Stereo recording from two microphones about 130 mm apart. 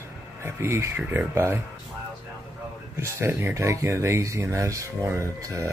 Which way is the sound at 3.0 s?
20° right (ahead or behind).